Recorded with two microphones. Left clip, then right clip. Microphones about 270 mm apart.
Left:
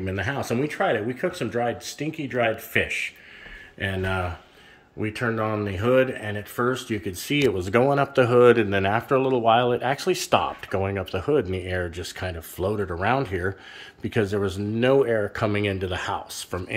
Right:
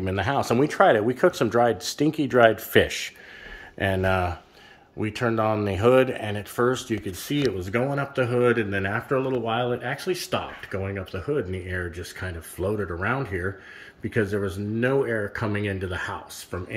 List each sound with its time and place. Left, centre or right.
0.0 s speech: centre